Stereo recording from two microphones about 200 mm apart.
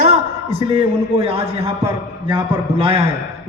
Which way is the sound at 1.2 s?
30° right (ahead or behind).